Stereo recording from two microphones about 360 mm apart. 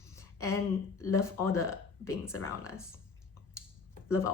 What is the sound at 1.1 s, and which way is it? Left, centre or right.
A woman's voice, centre.